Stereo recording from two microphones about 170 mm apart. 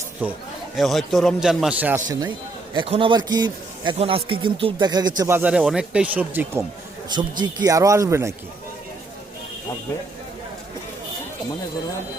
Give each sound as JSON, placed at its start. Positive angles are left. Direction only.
{"t": 0.2, "sound": "a man's voice", "side_deg": -10}
{"t": 0.8, "sound": "speech", "side_deg": 0}
{"t": 2.7, "sound": "a man's voice", "side_deg": -30}
{"t": 7.1, "sound": "a man's voice", "side_deg": -25}